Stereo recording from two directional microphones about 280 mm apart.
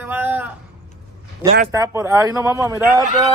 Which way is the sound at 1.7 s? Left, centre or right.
Centre.